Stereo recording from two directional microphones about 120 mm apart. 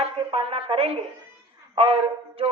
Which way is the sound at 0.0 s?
55° right (ahead or behind).